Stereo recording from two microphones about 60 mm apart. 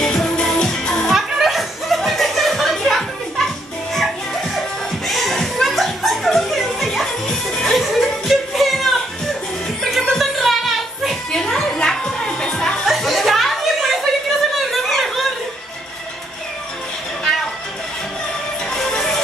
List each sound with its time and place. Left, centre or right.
0.1 s music: centre
1.1 s music: centre
4.6 s music: centre
12.8 s a sound: centre
18.7 s music: centre